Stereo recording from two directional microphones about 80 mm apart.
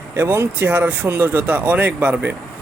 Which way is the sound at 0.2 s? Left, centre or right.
Right.